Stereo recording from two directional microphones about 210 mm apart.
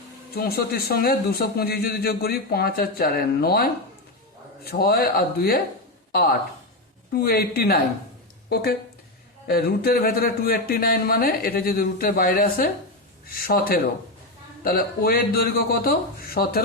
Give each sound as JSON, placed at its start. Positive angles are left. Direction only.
{"t": 0.3, "sound": "a man's voice", "side_deg": 50}
{"t": 9.5, "sound": "a man's voice", "side_deg": 50}